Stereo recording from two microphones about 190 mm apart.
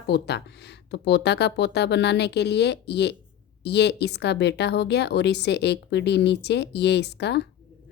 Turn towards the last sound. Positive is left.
turn(degrees=60)  # may be behind; listen again after turning